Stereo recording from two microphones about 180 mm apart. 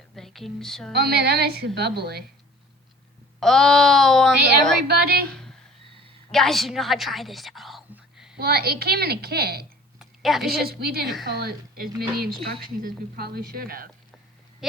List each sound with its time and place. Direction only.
0.2 s speech: centre (ahead or behind)
0.9 s a woman's voice: 60° right (ahead or behind)
3.4 s a woman's voice: centre (ahead or behind)
4.9 s a woman's voice: 60° right (ahead or behind)
6.3 s a woman's voice: centre (ahead or behind)
8.4 s a woman's voice: 60° right (ahead or behind)
10.0 s a sound: centre (ahead or behind)
10.4 s a woman's voice: 60° right (ahead or behind)
14.6 s sheep: centre (ahead or behind)